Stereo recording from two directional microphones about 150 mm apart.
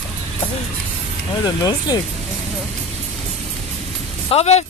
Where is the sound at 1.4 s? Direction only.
25° left (ahead or behind).